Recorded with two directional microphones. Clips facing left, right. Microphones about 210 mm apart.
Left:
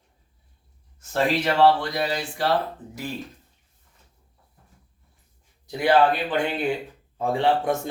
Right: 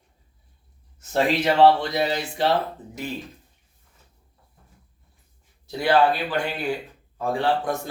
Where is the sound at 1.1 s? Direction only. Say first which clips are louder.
Right 2 dB; 20° right (ahead or behind).